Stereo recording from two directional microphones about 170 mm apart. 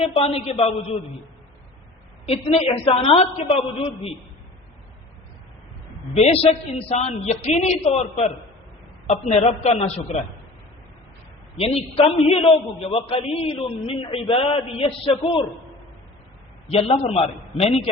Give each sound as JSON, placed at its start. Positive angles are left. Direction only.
{"t": 0.3, "sound": "a man's voice", "side_deg": 35}
{"t": 2.2, "sound": "a man's voice", "side_deg": 35}
{"t": 6.1, "sound": "a man's voice", "side_deg": 40}
{"t": 11.5, "sound": "a man's voice", "side_deg": 35}
{"t": 16.6, "sound": "a man's voice", "side_deg": 35}